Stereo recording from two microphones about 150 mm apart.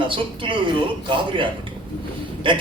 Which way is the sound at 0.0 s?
35° right (ahead or behind).